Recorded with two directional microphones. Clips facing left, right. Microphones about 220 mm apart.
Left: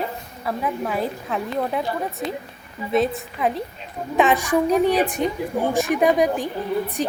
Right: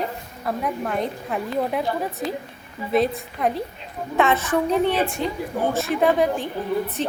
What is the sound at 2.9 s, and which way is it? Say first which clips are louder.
Speech: even; centre (ahead or behind).